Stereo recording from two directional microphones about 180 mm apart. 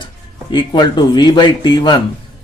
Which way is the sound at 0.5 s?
25° left (ahead or behind).